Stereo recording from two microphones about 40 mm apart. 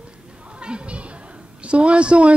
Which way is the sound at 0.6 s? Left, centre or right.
Right.